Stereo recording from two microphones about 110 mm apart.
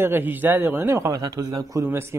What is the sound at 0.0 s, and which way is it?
Speech, 20° right (ahead or behind).